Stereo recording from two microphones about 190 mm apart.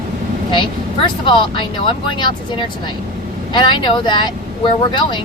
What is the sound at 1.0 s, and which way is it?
Speech, 25° left (ahead or behind).